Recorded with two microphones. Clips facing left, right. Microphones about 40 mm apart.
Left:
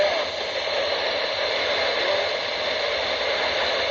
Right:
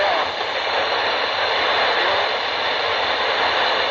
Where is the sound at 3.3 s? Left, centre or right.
Right.